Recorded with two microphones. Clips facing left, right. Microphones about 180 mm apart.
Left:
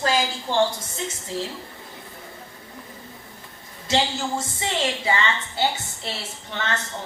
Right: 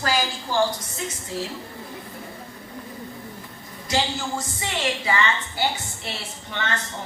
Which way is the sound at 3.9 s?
25° left (ahead or behind).